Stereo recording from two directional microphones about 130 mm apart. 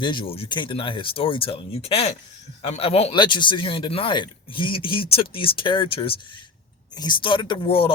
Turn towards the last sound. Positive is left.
turn(degrees=45)  # may be behind; listen again after turning